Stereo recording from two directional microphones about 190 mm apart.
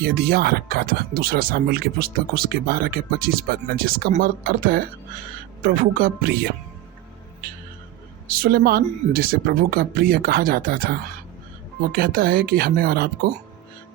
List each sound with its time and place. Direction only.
0.0 s speech: 55° right (ahead or behind)
8.3 s speech: 50° right (ahead or behind)